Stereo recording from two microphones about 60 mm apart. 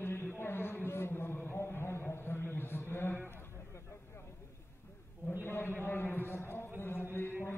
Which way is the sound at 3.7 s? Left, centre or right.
Left.